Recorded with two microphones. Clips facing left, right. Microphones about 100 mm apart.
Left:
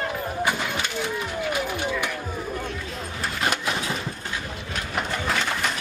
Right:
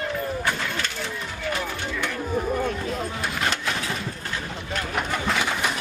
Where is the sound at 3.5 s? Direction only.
15° left (ahead or behind).